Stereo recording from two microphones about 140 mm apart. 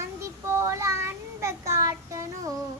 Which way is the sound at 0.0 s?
20° right (ahead or behind).